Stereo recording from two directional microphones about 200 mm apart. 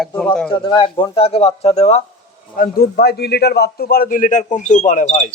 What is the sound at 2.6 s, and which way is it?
A man's voice, 50° left (ahead or behind).